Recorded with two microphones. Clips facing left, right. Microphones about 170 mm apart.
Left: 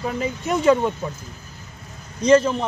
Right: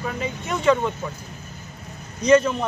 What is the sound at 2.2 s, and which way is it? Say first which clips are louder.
Speech: left 1 dB; 30° left (ahead or behind).